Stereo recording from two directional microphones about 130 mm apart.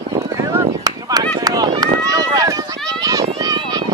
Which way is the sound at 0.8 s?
30° right (ahead or behind).